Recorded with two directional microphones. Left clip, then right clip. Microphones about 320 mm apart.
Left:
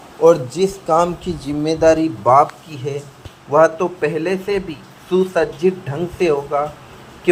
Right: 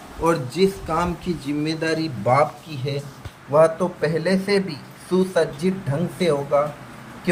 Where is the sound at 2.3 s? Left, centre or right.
Left.